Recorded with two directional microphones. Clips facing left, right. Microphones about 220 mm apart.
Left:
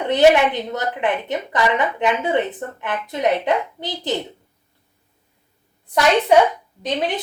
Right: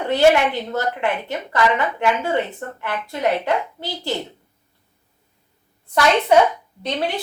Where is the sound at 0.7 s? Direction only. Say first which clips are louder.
Even; 20° left (ahead or behind).